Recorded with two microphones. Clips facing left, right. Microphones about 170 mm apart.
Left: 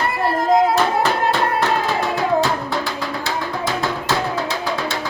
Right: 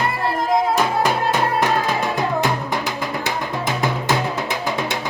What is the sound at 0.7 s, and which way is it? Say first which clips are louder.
Music: left 1 dB; 10° right (ahead or behind).